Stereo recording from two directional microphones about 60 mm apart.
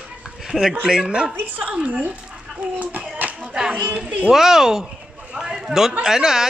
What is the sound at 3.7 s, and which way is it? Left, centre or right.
Speech, right.